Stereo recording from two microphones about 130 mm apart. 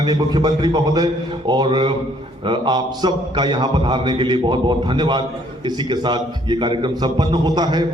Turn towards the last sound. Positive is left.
turn(degrees=-30)  # may be behind; listen again after turning